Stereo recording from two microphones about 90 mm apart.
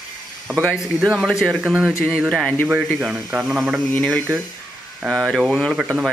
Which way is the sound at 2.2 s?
10° left (ahead or behind).